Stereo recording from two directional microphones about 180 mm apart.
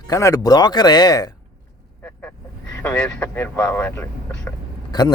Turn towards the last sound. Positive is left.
turn(degrees=25)  # may be behind; listen again after turning